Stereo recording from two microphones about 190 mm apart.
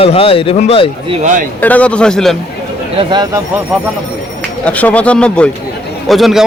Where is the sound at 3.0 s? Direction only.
25° right (ahead or behind).